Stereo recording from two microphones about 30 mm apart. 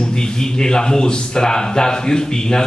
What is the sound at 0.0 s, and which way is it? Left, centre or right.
A man's voice, left.